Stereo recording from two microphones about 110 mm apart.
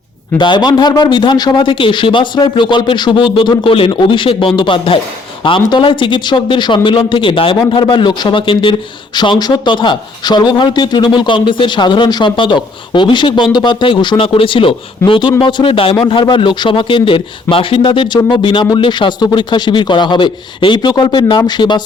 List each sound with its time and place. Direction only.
0.3 s a man's voice: 45° left (ahead or behind)